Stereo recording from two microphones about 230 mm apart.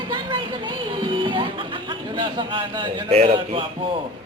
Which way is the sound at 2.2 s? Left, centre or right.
Centre.